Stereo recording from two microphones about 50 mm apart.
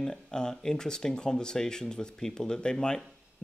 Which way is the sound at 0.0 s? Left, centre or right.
Centre.